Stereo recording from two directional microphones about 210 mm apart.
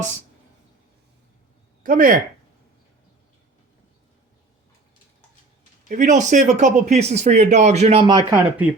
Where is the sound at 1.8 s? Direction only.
40° right (ahead or behind).